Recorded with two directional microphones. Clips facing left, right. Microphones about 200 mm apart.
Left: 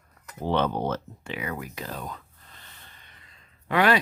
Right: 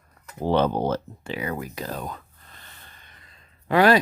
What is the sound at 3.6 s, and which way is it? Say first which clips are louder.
Speech: right 4 dB; 35° right (ahead or behind).